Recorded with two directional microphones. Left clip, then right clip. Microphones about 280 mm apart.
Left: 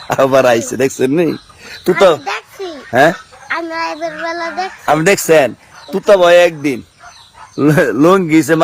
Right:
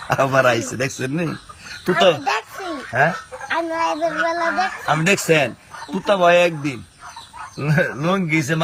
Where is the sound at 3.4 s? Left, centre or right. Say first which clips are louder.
Left 2 dB; centre.